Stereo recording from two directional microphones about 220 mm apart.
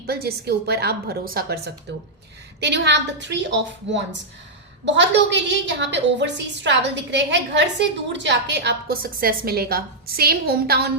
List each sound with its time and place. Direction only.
0.0 s a woman's voice: 45° right (ahead or behind)